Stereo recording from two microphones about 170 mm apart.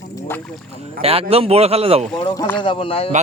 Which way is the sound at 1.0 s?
35° right (ahead or behind).